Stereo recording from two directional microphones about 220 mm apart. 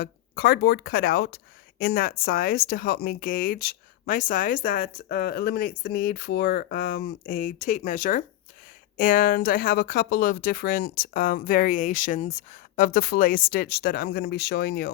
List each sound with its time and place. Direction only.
0.0 s speech: 45° left (ahead or behind)